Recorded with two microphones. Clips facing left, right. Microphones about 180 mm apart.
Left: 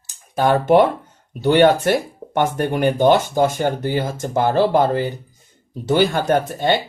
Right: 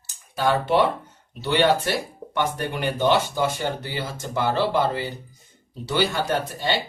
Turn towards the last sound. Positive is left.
turn(degrees=50)  # may be behind; listen again after turning